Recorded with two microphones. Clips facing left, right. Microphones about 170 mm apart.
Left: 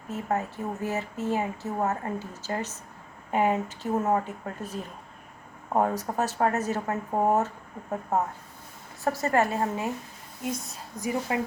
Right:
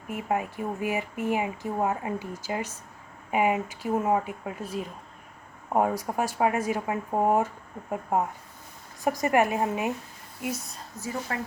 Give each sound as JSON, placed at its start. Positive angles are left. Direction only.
{"t": 0.1, "sound": "speech", "side_deg": -10}
{"t": 10.9, "sound": "speech", "side_deg": 15}